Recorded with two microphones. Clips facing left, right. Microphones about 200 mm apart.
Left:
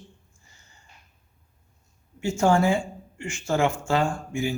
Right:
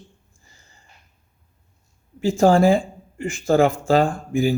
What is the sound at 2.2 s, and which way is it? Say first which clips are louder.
Speech: right 6 dB; 35° right (ahead or behind).